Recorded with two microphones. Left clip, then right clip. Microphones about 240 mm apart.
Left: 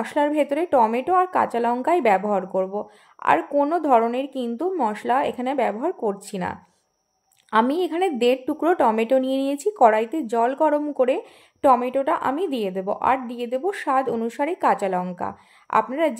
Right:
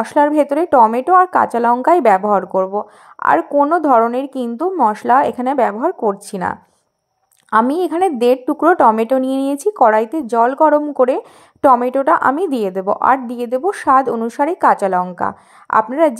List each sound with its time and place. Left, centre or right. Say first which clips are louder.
0.0 s a woman's voice: right 8 dB; centre